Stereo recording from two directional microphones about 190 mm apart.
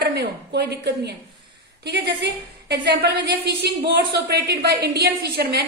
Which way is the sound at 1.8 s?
65° right (ahead or behind).